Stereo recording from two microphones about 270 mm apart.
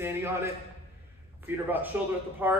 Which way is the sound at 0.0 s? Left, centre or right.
Centre.